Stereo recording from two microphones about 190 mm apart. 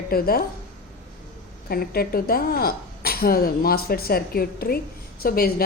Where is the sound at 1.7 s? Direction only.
50° left (ahead or behind).